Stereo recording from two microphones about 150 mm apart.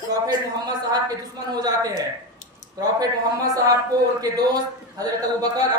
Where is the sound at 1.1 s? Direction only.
25° right (ahead or behind).